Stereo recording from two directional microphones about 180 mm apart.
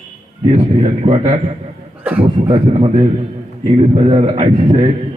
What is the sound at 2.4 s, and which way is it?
A man's voice, 30° right (ahead or behind).